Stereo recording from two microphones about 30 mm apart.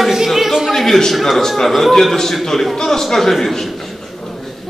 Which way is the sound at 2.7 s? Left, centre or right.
Centre.